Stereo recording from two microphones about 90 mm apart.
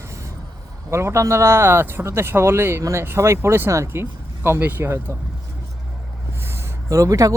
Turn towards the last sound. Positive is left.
turn(degrees=-40)  # may be behind; listen again after turning